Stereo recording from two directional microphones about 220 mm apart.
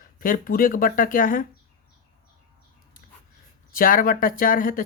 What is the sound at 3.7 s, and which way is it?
Speech, 40° left (ahead or behind).